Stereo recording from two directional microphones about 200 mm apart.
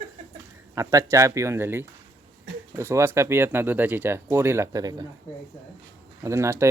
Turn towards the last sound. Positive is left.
turn(degrees=-15)  # may be behind; listen again after turning